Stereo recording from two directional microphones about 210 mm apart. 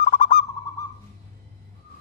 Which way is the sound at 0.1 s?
35° left (ahead or behind).